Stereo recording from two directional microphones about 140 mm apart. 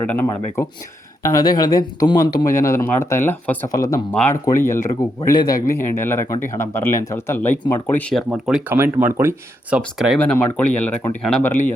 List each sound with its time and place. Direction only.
0.1 s speech: 20° left (ahead or behind)
4.1 s speech: 10° left (ahead or behind)
8.1 s speech: centre (ahead or behind)
8.7 s speech: 15° right (ahead or behind)
10.2 s speech: 10° left (ahead or behind)